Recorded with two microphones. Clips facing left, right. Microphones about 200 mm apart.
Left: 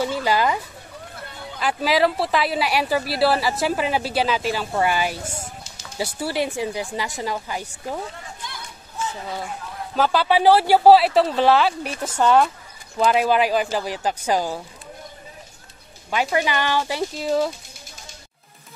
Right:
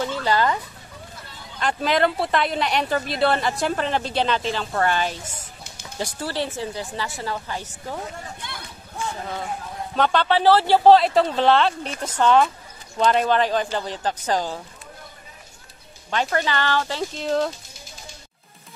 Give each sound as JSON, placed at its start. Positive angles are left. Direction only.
{"t": 0.0, "sound": "speech", "side_deg": 10}
{"t": 1.1, "sound": "a sound", "side_deg": 60}
{"t": 1.6, "sound": "speech", "side_deg": 5}
{"t": 9.9, "sound": "speech", "side_deg": 5}
{"t": 16.1, "sound": "speech", "side_deg": 10}